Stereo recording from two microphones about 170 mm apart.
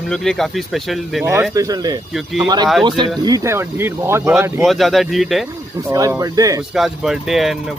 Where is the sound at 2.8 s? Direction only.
25° right (ahead or behind).